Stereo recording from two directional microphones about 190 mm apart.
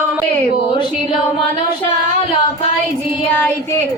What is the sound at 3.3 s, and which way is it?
Child singing, 10° left (ahead or behind).